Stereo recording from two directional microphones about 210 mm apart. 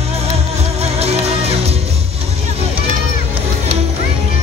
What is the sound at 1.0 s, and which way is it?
Music, 30° right (ahead or behind).